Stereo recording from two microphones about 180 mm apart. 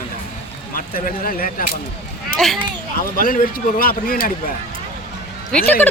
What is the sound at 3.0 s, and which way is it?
Speech, 50° left (ahead or behind).